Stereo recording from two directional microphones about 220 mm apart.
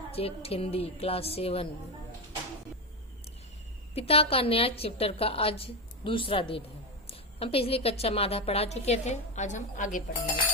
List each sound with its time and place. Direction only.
0.1 s a woman's voice: 25° left (ahead or behind)
3.9 s a woman's voice: 25° left (ahead or behind)